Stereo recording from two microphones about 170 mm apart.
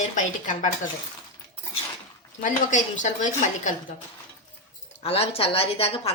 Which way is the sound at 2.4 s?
45° left (ahead or behind).